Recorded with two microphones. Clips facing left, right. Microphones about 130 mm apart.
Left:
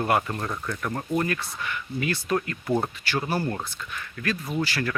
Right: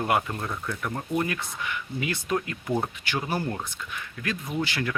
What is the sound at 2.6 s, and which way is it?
Speech, 5° left (ahead or behind).